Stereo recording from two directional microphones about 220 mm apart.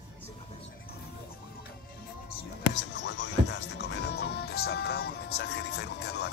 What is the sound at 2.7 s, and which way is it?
Music, 55° left (ahead or behind).